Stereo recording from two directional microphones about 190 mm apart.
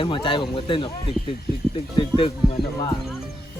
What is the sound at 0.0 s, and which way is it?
Speech, 25° left (ahead or behind).